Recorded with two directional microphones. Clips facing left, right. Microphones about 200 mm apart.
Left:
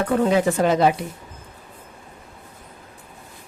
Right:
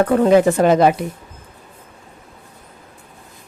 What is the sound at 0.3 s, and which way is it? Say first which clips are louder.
Speech: right 6 dB; 55° right (ahead or behind).